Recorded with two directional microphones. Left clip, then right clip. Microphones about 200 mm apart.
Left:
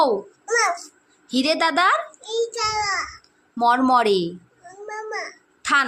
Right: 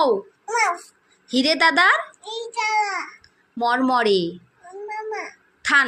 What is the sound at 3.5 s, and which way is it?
Speech, 5° left (ahead or behind).